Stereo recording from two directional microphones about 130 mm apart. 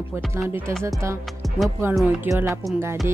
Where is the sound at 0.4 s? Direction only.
20° right (ahead or behind).